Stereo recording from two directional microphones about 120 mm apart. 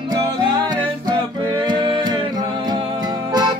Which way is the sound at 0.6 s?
35° right (ahead or behind).